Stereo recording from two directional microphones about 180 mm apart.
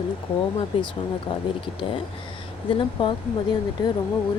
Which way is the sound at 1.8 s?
30° left (ahead or behind).